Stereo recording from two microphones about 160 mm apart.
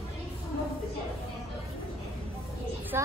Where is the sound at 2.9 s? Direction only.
15° right (ahead or behind).